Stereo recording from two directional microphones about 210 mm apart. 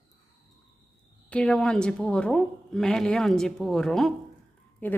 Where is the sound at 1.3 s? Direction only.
5° left (ahead or behind).